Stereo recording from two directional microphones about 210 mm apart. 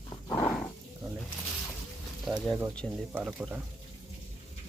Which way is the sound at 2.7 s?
5° left (ahead or behind).